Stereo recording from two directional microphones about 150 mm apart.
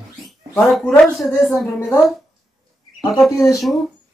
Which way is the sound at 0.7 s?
5° left (ahead or behind).